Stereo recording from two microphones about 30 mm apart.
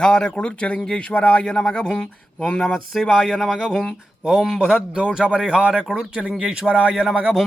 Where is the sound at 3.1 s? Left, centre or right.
Centre.